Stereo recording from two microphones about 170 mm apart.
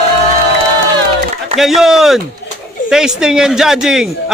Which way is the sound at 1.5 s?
Centre (ahead or behind).